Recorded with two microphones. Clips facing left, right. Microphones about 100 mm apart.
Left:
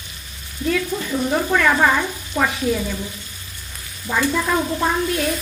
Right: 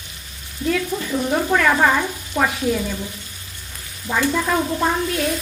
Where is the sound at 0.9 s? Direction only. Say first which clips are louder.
Even; 20° right (ahead or behind).